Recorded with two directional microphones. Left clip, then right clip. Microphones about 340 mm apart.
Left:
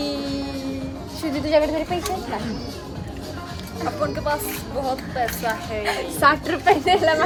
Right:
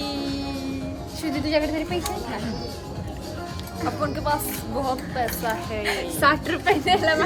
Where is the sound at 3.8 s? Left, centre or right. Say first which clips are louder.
Left 2 dB; centre.